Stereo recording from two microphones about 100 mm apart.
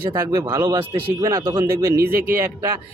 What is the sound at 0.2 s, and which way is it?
Speech, 35° right (ahead or behind).